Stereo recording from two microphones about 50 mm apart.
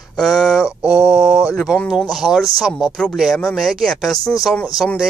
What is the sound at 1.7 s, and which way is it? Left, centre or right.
Speech, centre.